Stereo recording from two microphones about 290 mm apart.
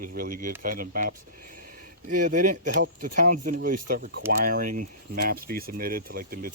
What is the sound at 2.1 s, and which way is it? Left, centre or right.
Speech, right.